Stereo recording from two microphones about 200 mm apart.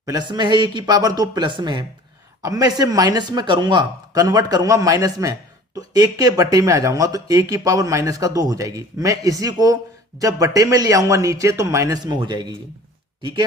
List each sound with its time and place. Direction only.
0.0 s speech: 20° right (ahead or behind)